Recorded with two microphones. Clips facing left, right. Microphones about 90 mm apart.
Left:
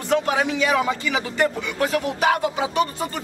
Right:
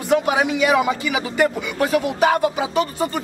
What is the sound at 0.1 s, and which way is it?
A man's voice, 15° right (ahead or behind).